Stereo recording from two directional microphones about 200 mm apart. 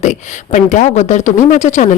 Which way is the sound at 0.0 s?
35° left (ahead or behind).